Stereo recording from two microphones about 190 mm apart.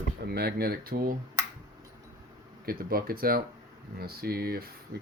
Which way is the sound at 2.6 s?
50° right (ahead or behind).